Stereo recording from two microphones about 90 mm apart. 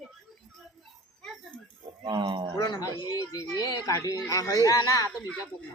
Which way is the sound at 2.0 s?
55° right (ahead or behind).